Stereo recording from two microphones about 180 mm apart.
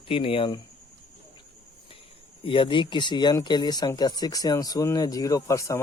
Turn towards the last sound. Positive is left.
turn(degrees=15)  # may be behind; listen again after turning